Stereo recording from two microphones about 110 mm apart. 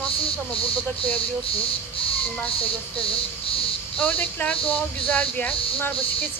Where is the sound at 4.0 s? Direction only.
15° left (ahead or behind).